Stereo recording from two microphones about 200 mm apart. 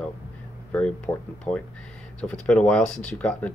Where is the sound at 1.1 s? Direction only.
15° left (ahead or behind).